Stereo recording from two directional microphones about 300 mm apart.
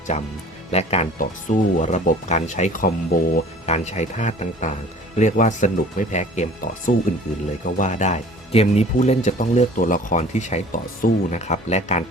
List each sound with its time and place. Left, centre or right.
0.1 s speech: left